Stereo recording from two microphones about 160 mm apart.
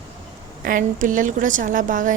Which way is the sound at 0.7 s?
55° right (ahead or behind).